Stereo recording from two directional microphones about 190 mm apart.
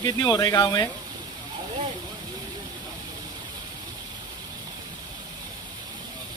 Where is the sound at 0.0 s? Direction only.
20° left (ahead or behind).